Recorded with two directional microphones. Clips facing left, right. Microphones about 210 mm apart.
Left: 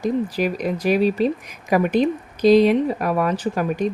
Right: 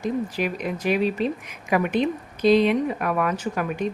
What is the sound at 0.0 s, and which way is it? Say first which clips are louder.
Speech: left 4 dB; 40° left (ahead or behind).